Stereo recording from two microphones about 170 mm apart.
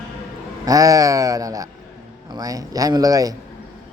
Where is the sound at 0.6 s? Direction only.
20° right (ahead or behind).